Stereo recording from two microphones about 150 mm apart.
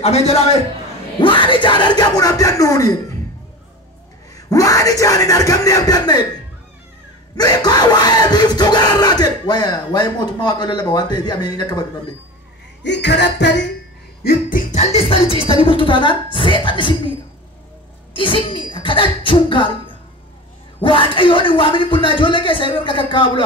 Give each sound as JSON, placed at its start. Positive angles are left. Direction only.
{"t": 0.0, "sound": "a man's voice", "side_deg": 45}
{"t": 1.2, "sound": "a sound", "side_deg": 35}
{"t": 4.5, "sound": "a sound", "side_deg": 20}
{"t": 14.2, "sound": "music", "side_deg": 90}
{"t": 14.7, "sound": "a man's voice", "side_deg": 45}
{"t": 18.1, "sound": "a man's voice", "side_deg": 35}
{"t": 20.8, "sound": "a man's voice", "side_deg": 35}